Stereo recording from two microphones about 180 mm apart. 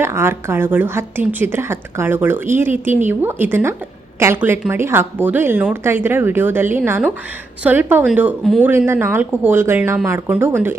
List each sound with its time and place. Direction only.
0.0 s a woman's voice: 15° right (ahead or behind)